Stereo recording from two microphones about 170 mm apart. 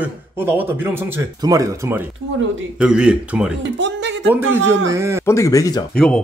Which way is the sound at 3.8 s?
90° right.